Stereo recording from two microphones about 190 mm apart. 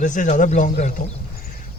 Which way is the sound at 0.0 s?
40° left (ahead or behind).